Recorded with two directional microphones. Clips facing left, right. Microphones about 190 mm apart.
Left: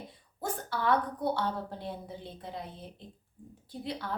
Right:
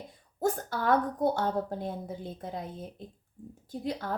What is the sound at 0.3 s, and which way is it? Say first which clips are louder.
A woman's voice: right 5 dB; 45° right (ahead or behind).